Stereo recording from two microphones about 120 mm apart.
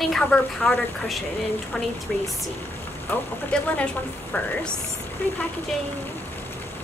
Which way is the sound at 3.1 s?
15° left (ahead or behind).